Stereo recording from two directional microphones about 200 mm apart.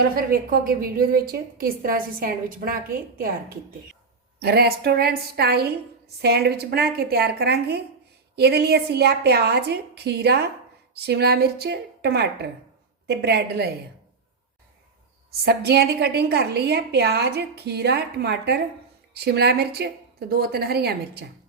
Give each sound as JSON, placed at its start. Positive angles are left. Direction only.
{"t": 0.2, "sound": "a woman's voice", "side_deg": -45}
{"t": 4.4, "sound": "a woman's voice", "side_deg": -55}
{"t": 15.3, "sound": "a woman's voice", "side_deg": -55}